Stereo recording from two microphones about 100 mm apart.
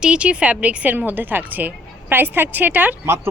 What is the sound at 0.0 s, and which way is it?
A woman's voice, 10° right (ahead or behind).